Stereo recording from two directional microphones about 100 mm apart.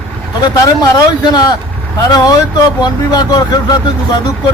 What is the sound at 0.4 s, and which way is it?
A man's voice, 45° left (ahead or behind).